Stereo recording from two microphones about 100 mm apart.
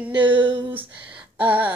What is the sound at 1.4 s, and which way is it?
Speech, 15° right (ahead or behind).